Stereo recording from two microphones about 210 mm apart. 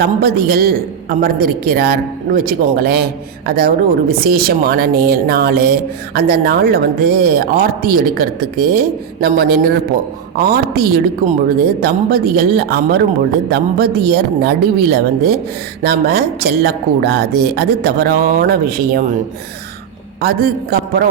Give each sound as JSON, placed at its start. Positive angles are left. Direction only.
{"t": 0.0, "sound": "a woman's voice", "side_deg": -50}
{"t": 20.2, "sound": "a woman's voice", "side_deg": -45}